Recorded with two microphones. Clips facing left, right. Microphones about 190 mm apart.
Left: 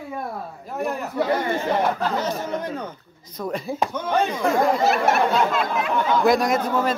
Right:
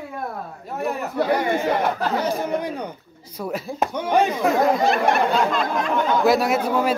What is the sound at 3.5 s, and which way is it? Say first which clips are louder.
Speech: even; 5° right (ahead or behind).